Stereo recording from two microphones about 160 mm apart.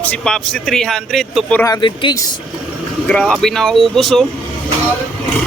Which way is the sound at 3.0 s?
5° left (ahead or behind).